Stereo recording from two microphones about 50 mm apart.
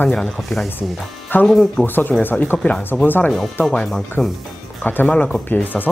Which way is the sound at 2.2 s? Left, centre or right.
Left.